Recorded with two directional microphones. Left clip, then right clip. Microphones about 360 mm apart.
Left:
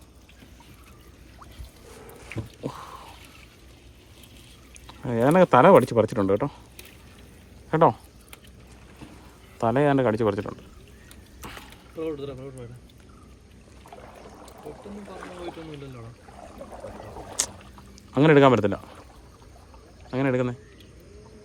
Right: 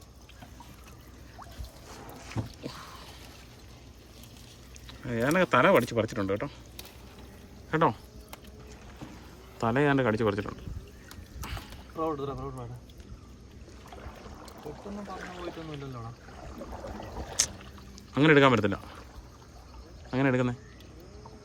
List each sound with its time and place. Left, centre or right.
4.9 s speech: centre
7.7 s speech: centre
9.6 s speech: centre
11.4 s boat: centre
14.2 s trickle: centre
16.4 s a sound: centre
17.4 s rowboat: centre
18.1 s speech: centre
20.1 s speech: centre